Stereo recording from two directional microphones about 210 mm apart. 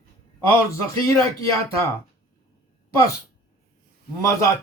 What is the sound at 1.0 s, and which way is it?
Speech, 15° left (ahead or behind).